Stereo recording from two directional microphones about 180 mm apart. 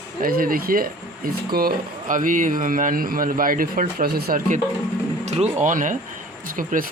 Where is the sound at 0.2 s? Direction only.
50° right (ahead or behind).